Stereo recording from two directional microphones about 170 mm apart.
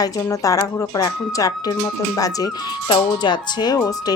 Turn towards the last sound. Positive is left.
turn(degrees=20)  # may be behind; listen again after turning